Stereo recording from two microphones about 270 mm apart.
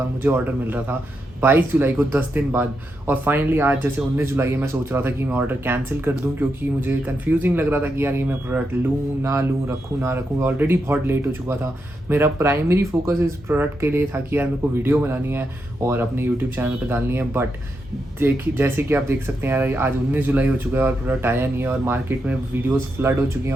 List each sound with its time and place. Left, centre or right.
0.2 s speech: centre